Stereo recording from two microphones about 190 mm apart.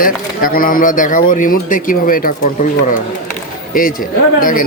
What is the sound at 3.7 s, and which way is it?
Speech, 45° left (ahead or behind).